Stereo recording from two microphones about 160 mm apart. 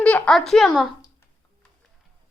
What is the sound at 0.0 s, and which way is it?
Speech, 5° left (ahead or behind).